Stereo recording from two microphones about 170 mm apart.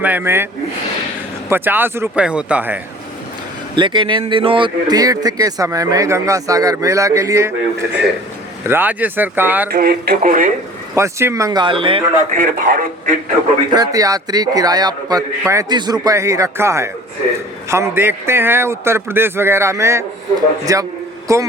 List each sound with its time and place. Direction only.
0.0 s a man's voice: 10° right (ahead or behind)
1.5 s a man's voice: 10° right (ahead or behind)
3.8 s a man's voice: 30° right (ahead or behind); by 9.6 s 10° right (ahead or behind)
9.6 s speech: 65° right (ahead or behind)
10.9 s speech: 15° right (ahead or behind); by 12.0 s 30° right (ahead or behind)
12.3 s speech: 55° right (ahead or behind)
13.7 s a man's voice: 20° right (ahead or behind)